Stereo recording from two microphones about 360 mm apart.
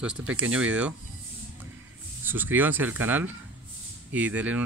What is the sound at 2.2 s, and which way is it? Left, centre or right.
Speech, centre.